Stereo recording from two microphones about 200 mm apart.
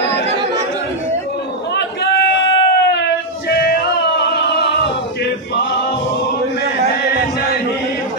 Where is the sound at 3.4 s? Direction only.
55° left (ahead or behind).